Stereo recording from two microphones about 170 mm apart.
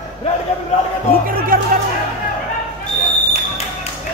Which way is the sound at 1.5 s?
55° right (ahead or behind).